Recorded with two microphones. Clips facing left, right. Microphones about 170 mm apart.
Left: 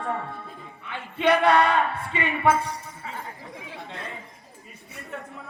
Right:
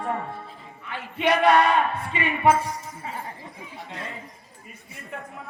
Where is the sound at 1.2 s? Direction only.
20° right (ahead or behind).